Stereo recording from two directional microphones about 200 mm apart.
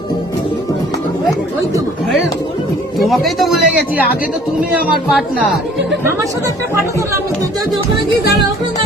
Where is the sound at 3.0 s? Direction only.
Centre (ahead or behind).